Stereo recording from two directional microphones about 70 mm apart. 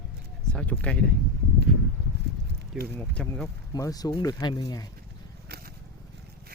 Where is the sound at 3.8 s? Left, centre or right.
Left.